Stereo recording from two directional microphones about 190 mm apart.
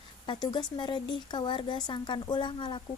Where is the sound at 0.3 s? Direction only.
25° left (ahead or behind).